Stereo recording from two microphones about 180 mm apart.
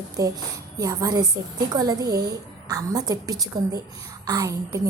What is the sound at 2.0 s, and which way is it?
Speech, 60° right (ahead or behind).